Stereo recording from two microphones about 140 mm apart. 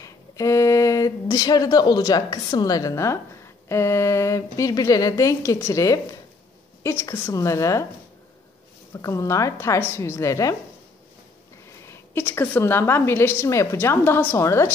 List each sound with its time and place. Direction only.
0.0 s a woman's voice: 25° left (ahead or behind)
8.9 s a woman's voice: 20° left (ahead or behind)
11.8 s a woman's voice: 20° left (ahead or behind)